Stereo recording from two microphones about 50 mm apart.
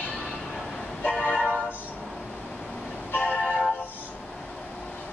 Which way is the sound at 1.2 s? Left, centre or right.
Left.